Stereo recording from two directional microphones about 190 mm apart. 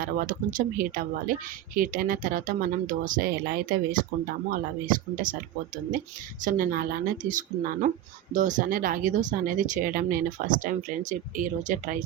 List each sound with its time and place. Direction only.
0.0 s speech: 45° right (ahead or behind)